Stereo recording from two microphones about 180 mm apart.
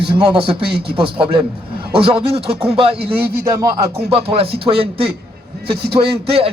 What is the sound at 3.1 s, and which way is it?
Speech, 10° right (ahead or behind).